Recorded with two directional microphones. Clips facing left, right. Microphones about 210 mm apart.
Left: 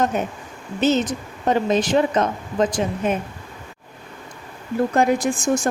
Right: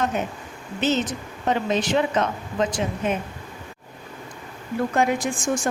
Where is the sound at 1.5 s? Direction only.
45° left (ahead or behind).